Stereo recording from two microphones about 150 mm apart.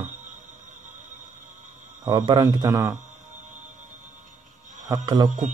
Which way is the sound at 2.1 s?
25° right (ahead or behind).